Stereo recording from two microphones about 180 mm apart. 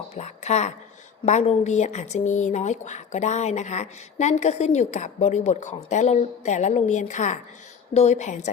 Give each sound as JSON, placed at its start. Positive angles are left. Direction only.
{"t": 0.1, "sound": "speech", "side_deg": 40}